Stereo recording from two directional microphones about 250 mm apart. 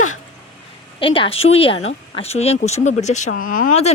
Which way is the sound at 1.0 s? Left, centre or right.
Left.